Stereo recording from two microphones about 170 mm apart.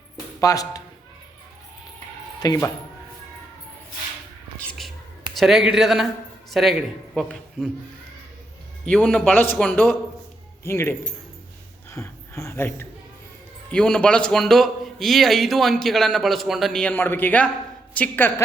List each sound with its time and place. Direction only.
0.3 s speech: 20° left (ahead or behind)
2.4 s speech: 20° left (ahead or behind)
5.3 s a man's voice: centre (ahead or behind)
8.8 s a man's voice: 5° left (ahead or behind)